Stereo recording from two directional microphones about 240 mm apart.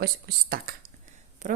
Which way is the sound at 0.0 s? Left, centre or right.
Right.